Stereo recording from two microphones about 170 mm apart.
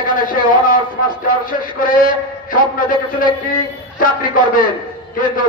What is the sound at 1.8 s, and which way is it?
A man's voice, 55° left (ahead or behind).